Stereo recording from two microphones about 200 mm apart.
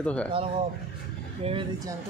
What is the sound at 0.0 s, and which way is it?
Speech, 5° left (ahead or behind).